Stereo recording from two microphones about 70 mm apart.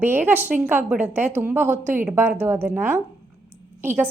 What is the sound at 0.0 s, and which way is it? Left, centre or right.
A woman's voice, right.